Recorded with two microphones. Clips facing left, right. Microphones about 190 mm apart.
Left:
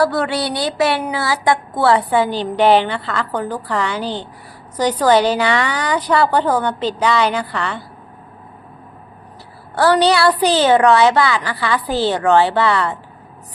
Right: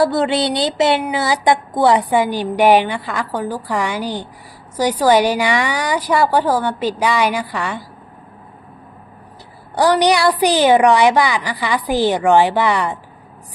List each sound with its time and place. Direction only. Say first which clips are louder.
0.0 s a sound: right 2 dB; 20° right (ahead or behind)
1.0 s a woman's voice: right 2 dB; 20° right (ahead or behind)
9.7 s a woman's voice: even; 15° right (ahead or behind)